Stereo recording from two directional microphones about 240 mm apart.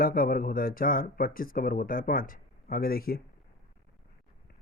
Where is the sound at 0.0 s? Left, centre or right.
Left.